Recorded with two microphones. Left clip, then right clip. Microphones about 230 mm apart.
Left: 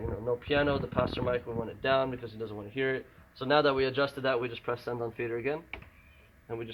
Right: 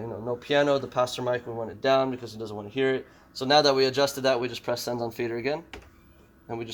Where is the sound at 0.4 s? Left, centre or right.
Right.